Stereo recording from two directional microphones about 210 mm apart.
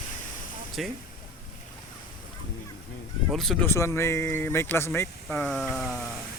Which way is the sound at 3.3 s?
Centre (ahead or behind).